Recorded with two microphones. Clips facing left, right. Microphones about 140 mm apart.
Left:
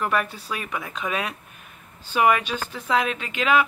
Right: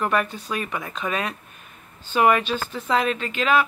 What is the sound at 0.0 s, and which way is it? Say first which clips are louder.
Speech: right 2 dB; 5° left (ahead or behind).